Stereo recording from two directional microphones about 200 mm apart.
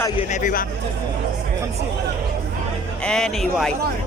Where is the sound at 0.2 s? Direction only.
35° left (ahead or behind).